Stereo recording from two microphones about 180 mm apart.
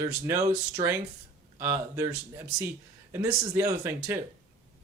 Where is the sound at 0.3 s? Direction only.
15° right (ahead or behind).